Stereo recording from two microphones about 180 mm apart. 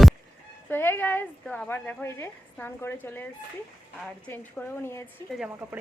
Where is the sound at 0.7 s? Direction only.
10° left (ahead or behind).